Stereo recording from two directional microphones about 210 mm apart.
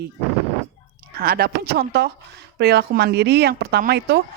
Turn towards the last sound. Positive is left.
turn(degrees=-50)  # may be behind; listen again after turning